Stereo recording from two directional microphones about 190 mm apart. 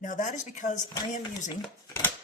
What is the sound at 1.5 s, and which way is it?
Speech, 15° left (ahead or behind).